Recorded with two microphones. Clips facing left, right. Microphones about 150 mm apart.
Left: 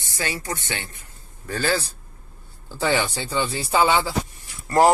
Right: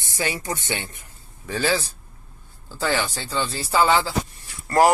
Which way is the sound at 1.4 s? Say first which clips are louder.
Right 1 dB; 5° right (ahead or behind).